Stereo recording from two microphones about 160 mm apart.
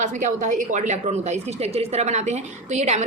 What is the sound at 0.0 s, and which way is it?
A woman's voice, 50° right (ahead or behind).